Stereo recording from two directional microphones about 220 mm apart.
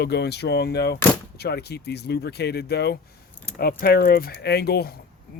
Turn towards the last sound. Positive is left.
turn(degrees=45)  # may be behind; listen again after turning